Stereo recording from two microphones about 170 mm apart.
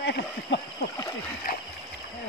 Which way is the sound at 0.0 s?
85° left.